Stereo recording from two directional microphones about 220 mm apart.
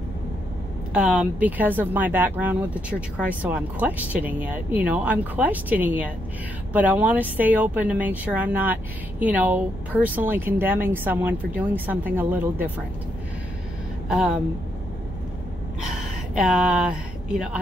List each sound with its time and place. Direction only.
0.9 s speech: 5° right (ahead or behind)
14.0 s speech: 5° right (ahead or behind)
15.8 s a sound: centre (ahead or behind)